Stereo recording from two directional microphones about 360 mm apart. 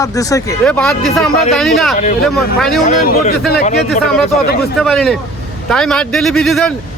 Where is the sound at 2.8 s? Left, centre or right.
Left.